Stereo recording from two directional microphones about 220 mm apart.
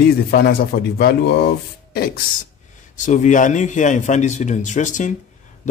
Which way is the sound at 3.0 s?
35° left (ahead or behind).